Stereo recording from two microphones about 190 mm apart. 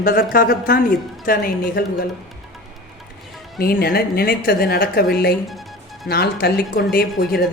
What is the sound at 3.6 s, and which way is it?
A woman's voice, 55° left (ahead or behind).